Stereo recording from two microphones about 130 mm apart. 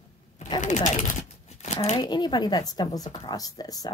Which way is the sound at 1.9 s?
35° left (ahead or behind).